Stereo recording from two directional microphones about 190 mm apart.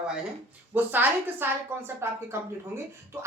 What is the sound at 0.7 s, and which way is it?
A woman's voice, 10° right (ahead or behind).